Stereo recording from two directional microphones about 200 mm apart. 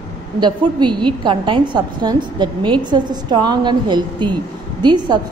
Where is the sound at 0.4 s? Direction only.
20° right (ahead or behind).